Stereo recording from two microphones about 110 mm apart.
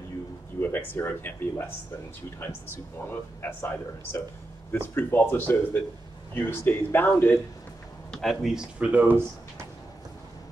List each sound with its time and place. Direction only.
0.6 s speech: 20° left (ahead or behind)
3.1 s a man's voice: 20° left (ahead or behind)
8.1 s speech: 5° left (ahead or behind); by 9.7 s 20° right (ahead or behind)